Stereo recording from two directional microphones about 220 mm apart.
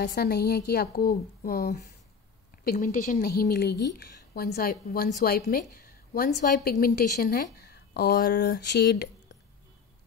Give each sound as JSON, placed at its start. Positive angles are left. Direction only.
{"t": 0.0, "sound": "a woman's voice", "side_deg": 40}